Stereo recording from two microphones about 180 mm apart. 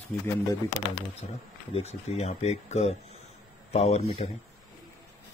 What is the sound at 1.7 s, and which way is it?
Speech, 35° left (ahead or behind).